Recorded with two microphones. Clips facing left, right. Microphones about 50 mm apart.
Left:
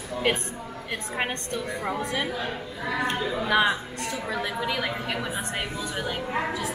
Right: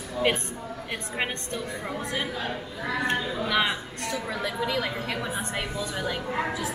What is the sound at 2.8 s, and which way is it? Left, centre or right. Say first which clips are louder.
A woman's voice: even; left.